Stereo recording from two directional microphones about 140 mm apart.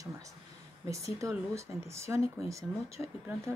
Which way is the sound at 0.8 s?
20° right (ahead or behind).